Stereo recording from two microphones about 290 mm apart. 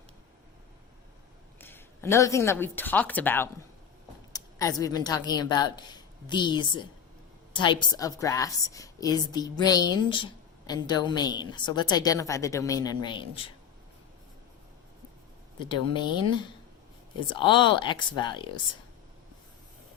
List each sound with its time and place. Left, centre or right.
1.5 s a woman's voice: centre
15.5 s a woman's voice: centre